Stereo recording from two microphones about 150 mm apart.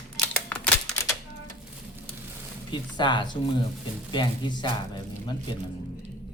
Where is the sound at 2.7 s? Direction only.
30° left (ahead or behind).